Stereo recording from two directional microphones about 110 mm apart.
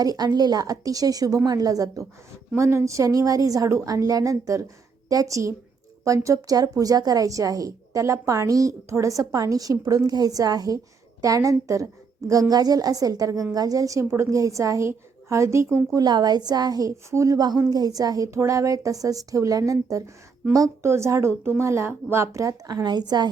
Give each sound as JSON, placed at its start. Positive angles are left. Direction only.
{"t": 0.0, "sound": "a woman's voice", "side_deg": -35}